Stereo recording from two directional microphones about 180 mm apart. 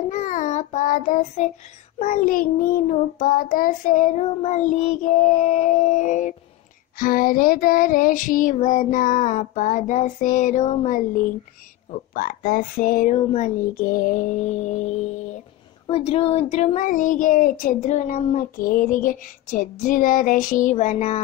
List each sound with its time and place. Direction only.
0.1 s child singing: 45° left (ahead or behind)
2.0 s speech: 45° left (ahead or behind)